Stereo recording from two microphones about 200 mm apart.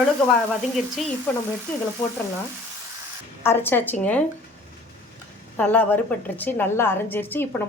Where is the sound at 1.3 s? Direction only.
10° left (ahead or behind).